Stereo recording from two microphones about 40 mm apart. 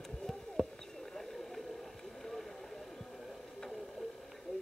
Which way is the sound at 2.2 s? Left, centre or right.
Centre.